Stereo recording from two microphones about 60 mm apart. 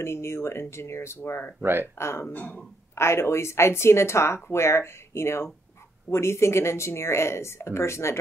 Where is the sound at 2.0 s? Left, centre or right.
Left.